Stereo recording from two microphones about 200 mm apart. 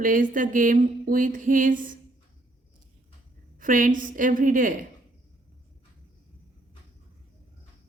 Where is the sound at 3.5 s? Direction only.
40° right (ahead or behind).